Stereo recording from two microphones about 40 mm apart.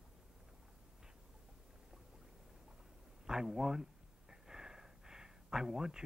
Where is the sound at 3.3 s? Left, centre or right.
Centre.